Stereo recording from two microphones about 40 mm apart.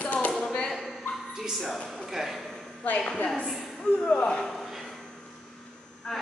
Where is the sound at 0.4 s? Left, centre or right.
Left.